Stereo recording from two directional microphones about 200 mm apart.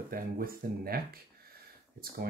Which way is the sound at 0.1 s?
45° right (ahead or behind).